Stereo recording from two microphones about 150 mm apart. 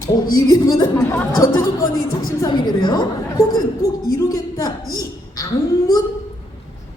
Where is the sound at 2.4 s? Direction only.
30° left (ahead or behind).